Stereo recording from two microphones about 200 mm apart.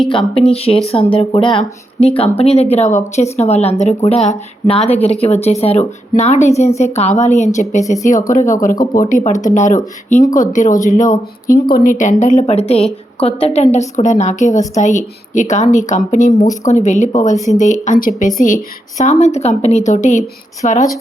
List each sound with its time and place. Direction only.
0.1 s a woman's voice: 25° left (ahead or behind)
9.0 s a woman's voice: 40° left (ahead or behind)